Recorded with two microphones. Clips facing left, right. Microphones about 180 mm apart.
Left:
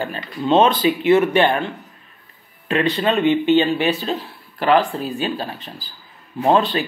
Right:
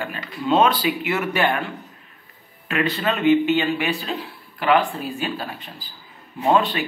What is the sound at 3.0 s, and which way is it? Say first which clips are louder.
Speech: right 2 dB; 25° left (ahead or behind).